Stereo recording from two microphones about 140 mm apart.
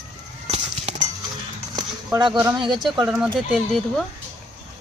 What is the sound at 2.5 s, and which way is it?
Speech, 30° right (ahead or behind).